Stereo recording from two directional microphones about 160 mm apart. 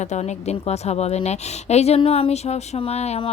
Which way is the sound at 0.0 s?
45° left (ahead or behind).